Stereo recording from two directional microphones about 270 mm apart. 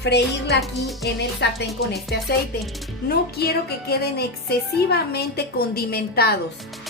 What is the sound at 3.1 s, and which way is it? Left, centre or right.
A woman's voice, left.